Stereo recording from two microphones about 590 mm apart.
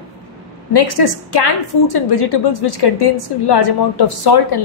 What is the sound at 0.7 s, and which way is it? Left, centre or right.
A woman's voice, left.